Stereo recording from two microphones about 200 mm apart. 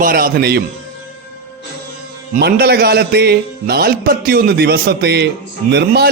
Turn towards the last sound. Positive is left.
turn(degrees=-50)  # may be behind; listen again after turning